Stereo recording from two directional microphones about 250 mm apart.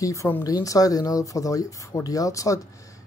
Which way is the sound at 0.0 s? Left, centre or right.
Centre.